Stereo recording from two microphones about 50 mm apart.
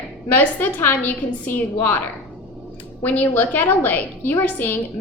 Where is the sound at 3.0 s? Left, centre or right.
Left.